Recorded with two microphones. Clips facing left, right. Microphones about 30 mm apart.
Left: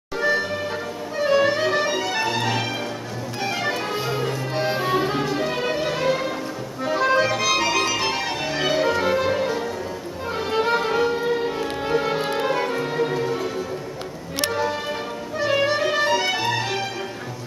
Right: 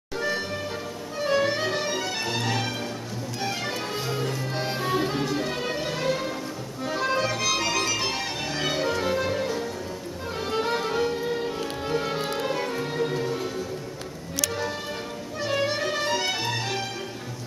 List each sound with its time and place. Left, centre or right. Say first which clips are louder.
0.2 s music: left 7 dB; centre
14.5 s music: left 6 dB; centre